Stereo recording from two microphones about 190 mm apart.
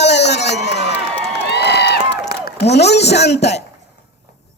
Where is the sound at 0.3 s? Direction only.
65° left (ahead or behind).